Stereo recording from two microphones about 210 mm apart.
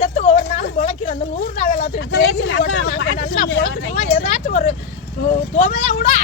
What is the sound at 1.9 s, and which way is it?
Speech, 70° left (ahead or behind).